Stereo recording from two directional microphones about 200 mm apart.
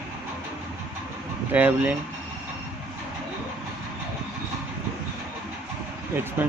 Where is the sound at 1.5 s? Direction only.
5° right (ahead or behind).